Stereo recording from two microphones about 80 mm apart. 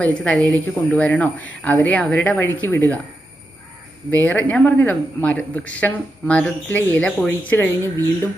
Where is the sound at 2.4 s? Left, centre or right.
Left.